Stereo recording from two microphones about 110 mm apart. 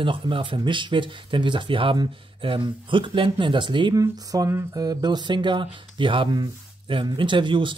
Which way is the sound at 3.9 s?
30° right (ahead or behind).